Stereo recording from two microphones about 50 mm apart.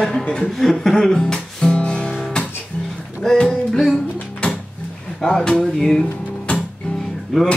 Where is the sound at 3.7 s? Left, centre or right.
Centre.